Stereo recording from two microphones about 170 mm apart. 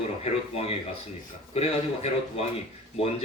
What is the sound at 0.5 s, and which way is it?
A man's voice, 35° left (ahead or behind).